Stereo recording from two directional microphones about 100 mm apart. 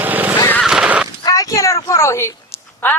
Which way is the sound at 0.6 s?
10° right (ahead or behind).